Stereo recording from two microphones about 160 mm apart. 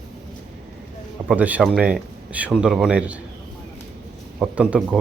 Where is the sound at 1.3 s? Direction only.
10° right (ahead or behind).